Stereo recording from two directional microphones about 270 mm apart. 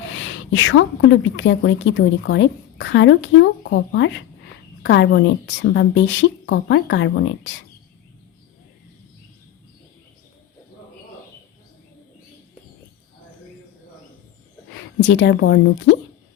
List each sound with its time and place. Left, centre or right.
0.1 s a woman's voice: left
15.0 s a woman's voice: left